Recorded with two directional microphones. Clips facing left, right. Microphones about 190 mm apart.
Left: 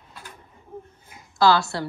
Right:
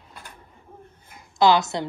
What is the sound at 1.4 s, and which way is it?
Speech, 20° right (ahead or behind).